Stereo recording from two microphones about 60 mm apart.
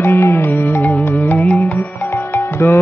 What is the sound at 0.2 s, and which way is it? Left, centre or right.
Music, left.